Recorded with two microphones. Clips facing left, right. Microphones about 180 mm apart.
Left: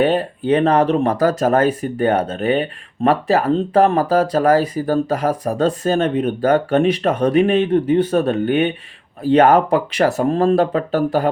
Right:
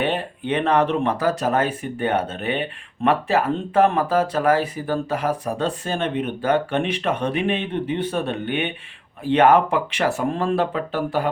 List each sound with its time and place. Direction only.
0.0 s speech: 40° left (ahead or behind)